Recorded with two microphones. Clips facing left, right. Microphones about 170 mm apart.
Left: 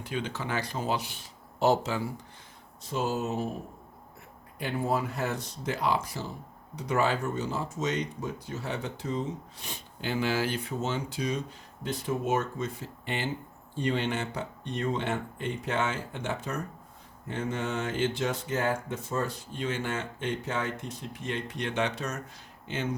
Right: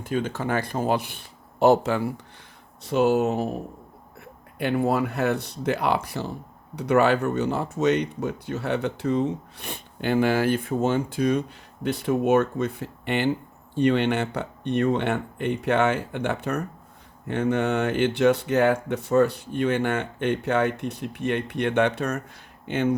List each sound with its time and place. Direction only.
0.0 s speech: 50° right (ahead or behind); by 3.5 s 65° right (ahead or behind)
4.5 s speech: 65° right (ahead or behind)